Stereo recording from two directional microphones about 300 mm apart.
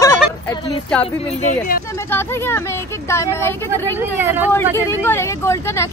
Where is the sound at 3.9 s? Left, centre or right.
Centre.